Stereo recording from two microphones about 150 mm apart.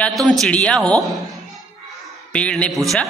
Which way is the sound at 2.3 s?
10° left (ahead or behind).